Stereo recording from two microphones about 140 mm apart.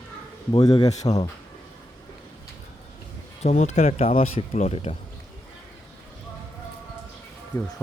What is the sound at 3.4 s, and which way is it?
Speech, 55° left (ahead or behind).